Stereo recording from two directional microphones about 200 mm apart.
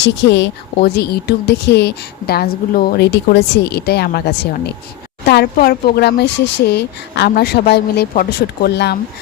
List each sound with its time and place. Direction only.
0.0 s speech: 60° left (ahead or behind)